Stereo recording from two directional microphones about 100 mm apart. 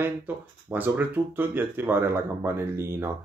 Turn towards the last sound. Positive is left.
turn(degrees=-25)  # may be behind; listen again after turning